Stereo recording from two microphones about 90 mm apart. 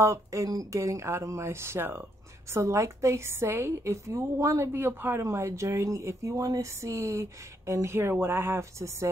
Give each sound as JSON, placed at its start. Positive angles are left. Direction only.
{"t": 0.0, "sound": "a woman's voice", "side_deg": -35}